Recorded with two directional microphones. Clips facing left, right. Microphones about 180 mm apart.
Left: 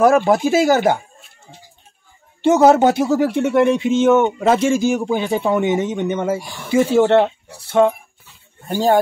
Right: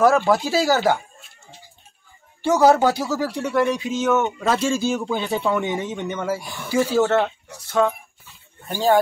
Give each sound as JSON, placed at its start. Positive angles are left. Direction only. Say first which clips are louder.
{"t": 0.0, "sound": "speech", "louder": "left 4 dB", "side_deg": 15}
{"t": 2.4, "sound": "speech", "louder": "left 4 dB", "side_deg": 25}